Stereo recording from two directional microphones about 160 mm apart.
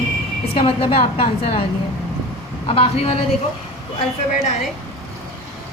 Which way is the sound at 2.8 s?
40° left (ahead or behind).